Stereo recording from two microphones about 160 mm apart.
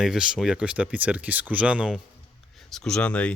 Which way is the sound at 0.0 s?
5° right (ahead or behind).